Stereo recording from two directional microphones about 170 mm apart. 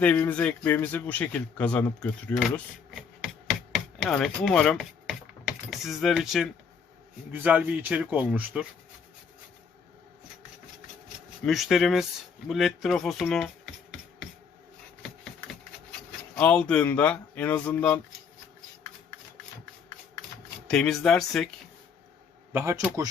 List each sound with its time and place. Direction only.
0.0 s speech: 10° left (ahead or behind)
4.0 s a man's voice: centre (ahead or behind)
11.4 s speech: centre (ahead or behind)
16.3 s speech: 5° left (ahead or behind)
20.7 s speech: 5° left (ahead or behind)
22.5 s a man's voice: 15° right (ahead or behind)